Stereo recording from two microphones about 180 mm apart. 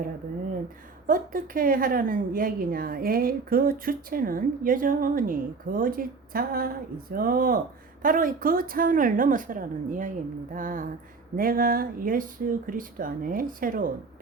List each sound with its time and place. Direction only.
1.0 s a woman's voice: 50° right (ahead or behind)